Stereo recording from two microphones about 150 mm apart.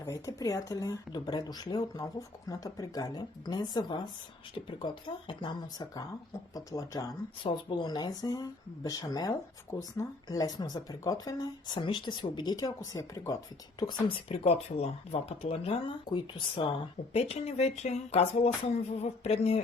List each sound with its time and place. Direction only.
0.0 s speech: 20° left (ahead or behind)
7.4 s speech: 35° left (ahead or behind)
17.2 s speech: 45° left (ahead or behind)